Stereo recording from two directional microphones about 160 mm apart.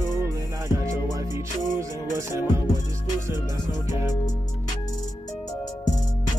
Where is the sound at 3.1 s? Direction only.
25° left (ahead or behind).